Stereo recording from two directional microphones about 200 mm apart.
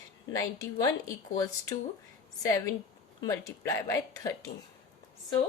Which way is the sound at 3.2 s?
15° left (ahead or behind).